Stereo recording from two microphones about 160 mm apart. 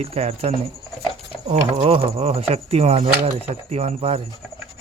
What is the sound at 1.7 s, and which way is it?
Speech, 35° right (ahead or behind).